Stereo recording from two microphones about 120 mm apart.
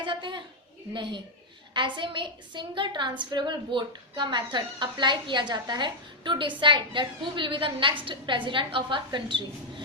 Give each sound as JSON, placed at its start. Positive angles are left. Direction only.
{"t": 0.0, "sound": "a woman's voice", "side_deg": -40}
{"t": 1.7, "sound": "a woman's voice", "side_deg": -45}